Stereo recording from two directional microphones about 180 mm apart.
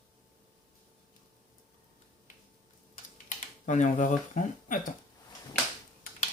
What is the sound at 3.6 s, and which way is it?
Speech, 45° left (ahead or behind).